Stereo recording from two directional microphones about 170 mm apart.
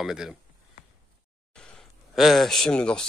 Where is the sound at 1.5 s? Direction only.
Centre (ahead or behind).